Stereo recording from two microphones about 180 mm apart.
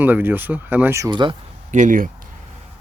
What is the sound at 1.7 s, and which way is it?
Speech, 45° right (ahead or behind).